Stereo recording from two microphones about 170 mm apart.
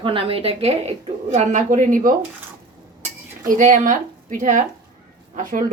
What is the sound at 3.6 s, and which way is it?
A woman's voice, 50° right (ahead or behind).